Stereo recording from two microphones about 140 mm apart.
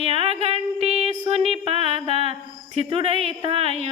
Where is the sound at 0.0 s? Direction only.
45° right (ahead or behind).